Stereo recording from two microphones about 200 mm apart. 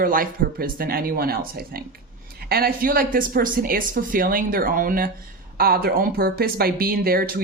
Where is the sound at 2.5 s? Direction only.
45° right (ahead or behind).